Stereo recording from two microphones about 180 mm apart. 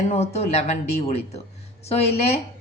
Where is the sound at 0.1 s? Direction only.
35° left (ahead or behind).